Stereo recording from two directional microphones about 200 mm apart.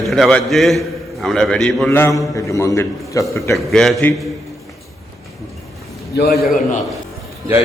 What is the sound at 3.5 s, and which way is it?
Speech, centre (ahead or behind).